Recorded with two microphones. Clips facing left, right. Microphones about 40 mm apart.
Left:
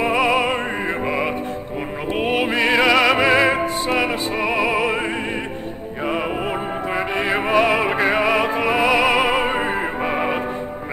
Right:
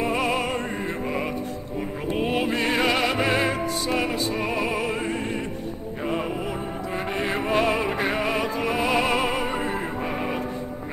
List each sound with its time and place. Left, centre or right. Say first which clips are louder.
0.0 s opera: left 6 dB; left
1.0 s music: left 5 dB; left
7.2 s music: left 5 dB; left